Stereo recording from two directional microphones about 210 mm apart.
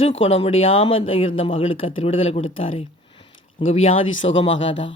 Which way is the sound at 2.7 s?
25° left (ahead or behind).